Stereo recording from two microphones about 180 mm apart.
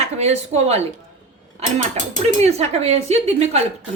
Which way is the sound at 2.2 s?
35° right (ahead or behind).